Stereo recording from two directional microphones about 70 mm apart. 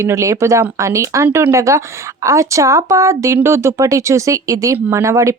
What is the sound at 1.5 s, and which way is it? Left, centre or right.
Speech, right.